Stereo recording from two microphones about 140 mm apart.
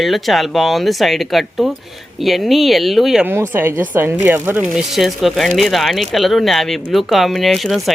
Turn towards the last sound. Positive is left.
turn(degrees=0)  # may be behind; listen again after turning